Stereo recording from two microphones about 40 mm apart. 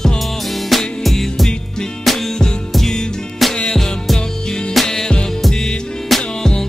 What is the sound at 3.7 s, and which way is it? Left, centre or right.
Music, centre.